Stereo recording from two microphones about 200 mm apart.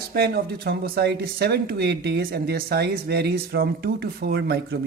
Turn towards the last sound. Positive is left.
turn(degrees=-55)  # may be behind; listen again after turning